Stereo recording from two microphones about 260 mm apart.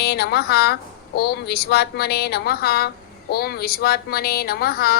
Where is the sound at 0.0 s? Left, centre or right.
Left.